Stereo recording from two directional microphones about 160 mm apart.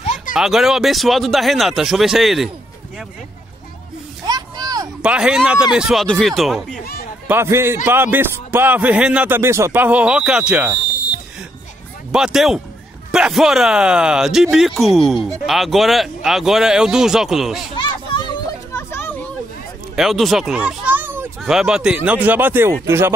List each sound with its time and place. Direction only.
0.0 s a sound: 45° left (ahead or behind)
0.3 s speech: centre (ahead or behind)
4.3 s a sound: 25° right (ahead or behind)
5.0 s speech: 5° right (ahead or behind)
6.8 s speech: 75° left (ahead or behind)
7.2 s speech: 15° right (ahead or behind)
12.1 s speech: 5° right (ahead or behind)
17.7 s children playing: 30° left (ahead or behind)
18.7 s children playing: 15° left (ahead or behind)
20.0 s speech: centre (ahead or behind)
21.4 s speech: 5° right (ahead or behind)